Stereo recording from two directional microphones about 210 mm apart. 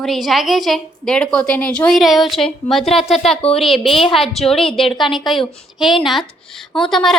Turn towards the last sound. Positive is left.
turn(degrees=0)  # may be behind; listen again after turning